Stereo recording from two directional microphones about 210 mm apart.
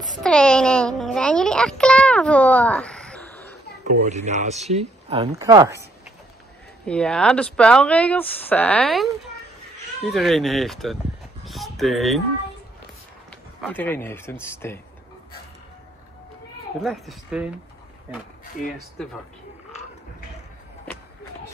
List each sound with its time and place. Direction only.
0.0 s a sound: centre (ahead or behind)
3.8 s speech: 35° right (ahead or behind)
5.3 s speech: 15° right (ahead or behind)
6.9 s speech: 5° left (ahead or behind)
13.3 s speech: 5° left (ahead or behind)
16.8 s speech: centre (ahead or behind)
19.0 s speech: 5° left (ahead or behind)